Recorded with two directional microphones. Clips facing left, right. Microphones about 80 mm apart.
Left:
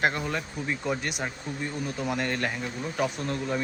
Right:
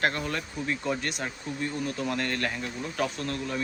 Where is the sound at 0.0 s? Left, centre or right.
Centre.